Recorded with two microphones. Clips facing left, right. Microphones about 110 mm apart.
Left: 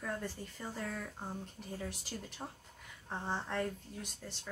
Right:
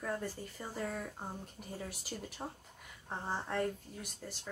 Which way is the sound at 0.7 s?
15° right (ahead or behind).